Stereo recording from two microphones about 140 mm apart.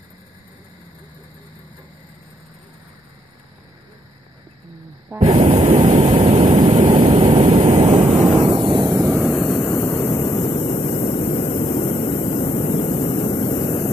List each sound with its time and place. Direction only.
5.2 s a sound: 45° right (ahead or behind)
6.7 s vehicle: 45° right (ahead or behind)
9.1 s vehicle: centre (ahead or behind)
9.6 s vehicle: 15° left (ahead or behind); by 13.8 s 35° left (ahead or behind)